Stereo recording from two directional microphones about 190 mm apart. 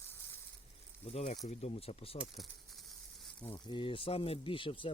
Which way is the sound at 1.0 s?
35° left (ahead or behind).